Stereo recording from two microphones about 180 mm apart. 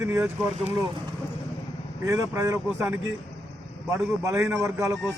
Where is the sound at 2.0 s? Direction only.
20° right (ahead or behind).